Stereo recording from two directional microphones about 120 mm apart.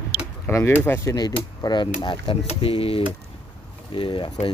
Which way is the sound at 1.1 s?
35° left (ahead or behind).